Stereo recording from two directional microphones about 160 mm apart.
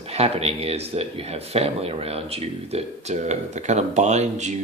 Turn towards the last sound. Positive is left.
turn(degrees=-45)  # may be behind; listen again after turning